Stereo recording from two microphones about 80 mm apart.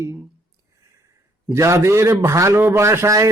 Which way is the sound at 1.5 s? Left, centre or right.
Right.